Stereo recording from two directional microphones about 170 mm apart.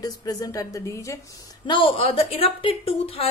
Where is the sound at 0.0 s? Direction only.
20° left (ahead or behind).